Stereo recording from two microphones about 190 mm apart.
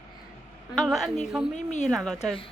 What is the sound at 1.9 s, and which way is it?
Speech, centre (ahead or behind).